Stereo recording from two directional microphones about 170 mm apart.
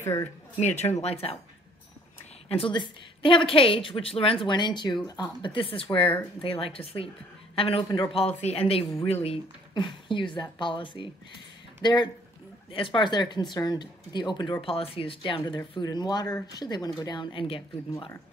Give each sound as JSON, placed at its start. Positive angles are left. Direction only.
{"t": 0.0, "sound": "speech", "side_deg": 15}
{"t": 0.6, "sound": "a woman's voice", "side_deg": 40}
{"t": 2.4, "sound": "a woman's voice", "side_deg": 35}